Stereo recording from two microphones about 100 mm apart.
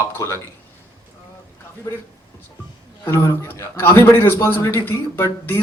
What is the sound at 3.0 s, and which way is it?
A man's voice, 25° left (ahead or behind).